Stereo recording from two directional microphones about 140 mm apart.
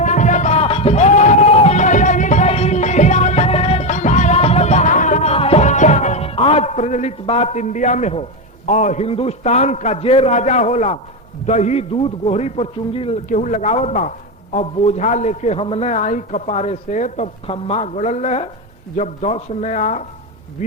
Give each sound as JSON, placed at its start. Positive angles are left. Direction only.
{"t": 0.0, "sound": "music", "side_deg": 60}
{"t": 8.6, "sound": "a man's voice", "side_deg": 60}
{"t": 13.2, "sound": "a man's voice", "side_deg": 60}
{"t": 17.4, "sound": "a man's voice", "side_deg": 45}